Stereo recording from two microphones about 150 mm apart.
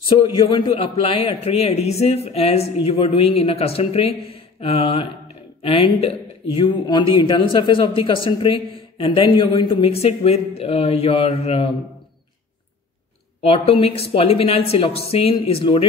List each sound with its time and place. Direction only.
0.5 s speech: 35° left (ahead or behind)
13.4 s speech: 40° left (ahead or behind)